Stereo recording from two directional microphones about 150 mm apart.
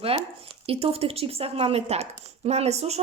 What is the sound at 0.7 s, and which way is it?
A woman's voice, 40° right (ahead or behind).